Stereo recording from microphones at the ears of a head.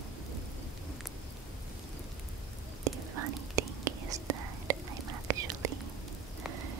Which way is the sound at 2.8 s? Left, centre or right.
Right.